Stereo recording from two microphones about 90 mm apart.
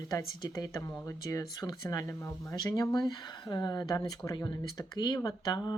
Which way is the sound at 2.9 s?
50° left (ahead or behind).